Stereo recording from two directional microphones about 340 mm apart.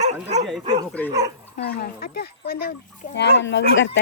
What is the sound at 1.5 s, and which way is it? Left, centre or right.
Speech, left.